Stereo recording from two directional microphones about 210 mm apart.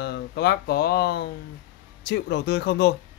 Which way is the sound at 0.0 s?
55° left (ahead or behind).